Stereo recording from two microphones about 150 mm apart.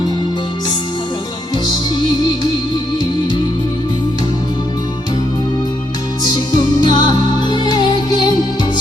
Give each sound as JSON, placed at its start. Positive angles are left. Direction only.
{"t": 2.0, "sound": "music", "side_deg": 30}
{"t": 6.2, "sound": "music", "side_deg": 30}